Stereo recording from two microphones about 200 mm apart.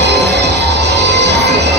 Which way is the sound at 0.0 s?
60° right (ahead or behind).